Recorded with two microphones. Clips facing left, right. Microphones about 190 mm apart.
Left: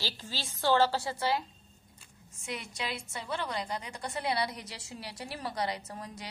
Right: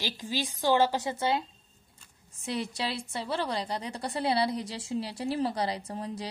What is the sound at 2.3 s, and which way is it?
A woman's voice, 35° right (ahead or behind).